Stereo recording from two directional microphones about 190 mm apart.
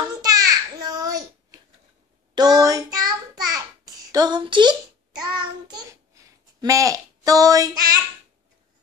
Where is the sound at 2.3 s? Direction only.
20° right (ahead or behind).